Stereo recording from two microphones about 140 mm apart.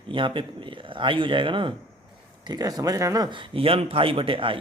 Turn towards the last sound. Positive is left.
turn(degrees=-40)  # may be behind; listen again after turning